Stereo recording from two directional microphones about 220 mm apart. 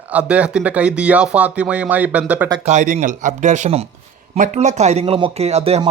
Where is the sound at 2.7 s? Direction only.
35° right (ahead or behind).